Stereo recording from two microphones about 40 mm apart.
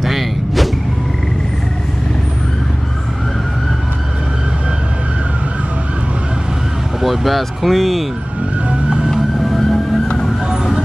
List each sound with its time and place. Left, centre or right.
0.0 s vehicle: centre
7.0 s speech: centre
8.6 s vehicle: right
9.4 s music: centre
10.5 s vehicle: centre